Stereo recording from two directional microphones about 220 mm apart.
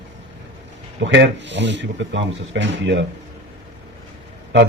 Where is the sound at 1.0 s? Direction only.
55° right (ahead or behind).